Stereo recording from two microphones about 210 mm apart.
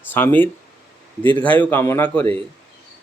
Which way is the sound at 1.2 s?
25° right (ahead or behind).